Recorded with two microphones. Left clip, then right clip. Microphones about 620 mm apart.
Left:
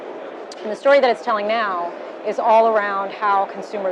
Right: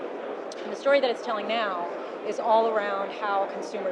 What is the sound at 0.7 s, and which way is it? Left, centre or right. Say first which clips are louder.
Speech: left 8 dB; left.